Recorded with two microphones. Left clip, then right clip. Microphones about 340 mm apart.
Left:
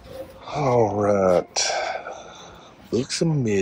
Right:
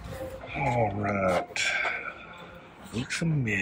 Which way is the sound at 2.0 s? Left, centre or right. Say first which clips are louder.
Left 4 dB; centre.